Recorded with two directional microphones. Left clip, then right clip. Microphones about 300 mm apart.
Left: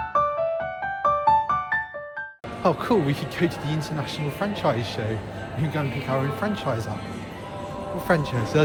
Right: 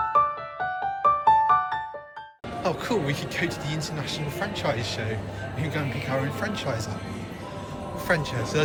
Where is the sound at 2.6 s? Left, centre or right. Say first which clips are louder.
Left 5 dB; centre.